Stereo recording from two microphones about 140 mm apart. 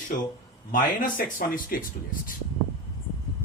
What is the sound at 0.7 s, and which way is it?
Speech, 75° left (ahead or behind).